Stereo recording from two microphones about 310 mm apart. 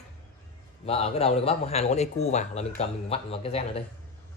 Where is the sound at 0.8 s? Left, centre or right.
Centre.